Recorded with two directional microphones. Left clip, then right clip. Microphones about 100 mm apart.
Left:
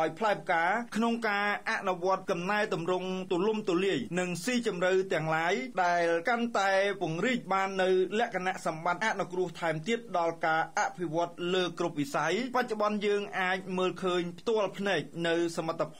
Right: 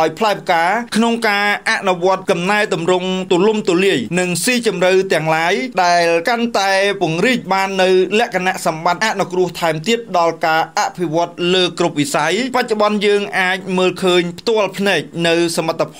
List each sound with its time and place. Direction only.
0.0 s a man's voice: 30° right (ahead or behind)